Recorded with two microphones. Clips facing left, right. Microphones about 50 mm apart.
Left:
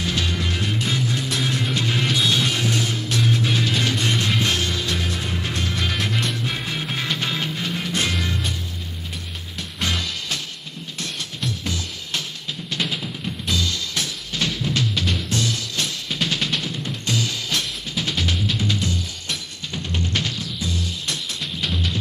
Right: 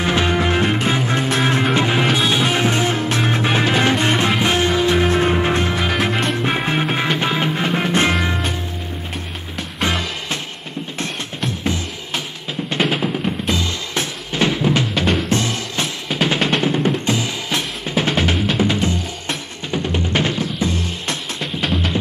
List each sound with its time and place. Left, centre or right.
0.0 s music: right
5.0 s music: right
5.8 s music: right
6.0 s music: right
11.0 s music: right
12.6 s drum: right
15.0 s music: right
16.1 s music: centre
16.3 s music: right
17.0 s drum: right
17.9 s music: right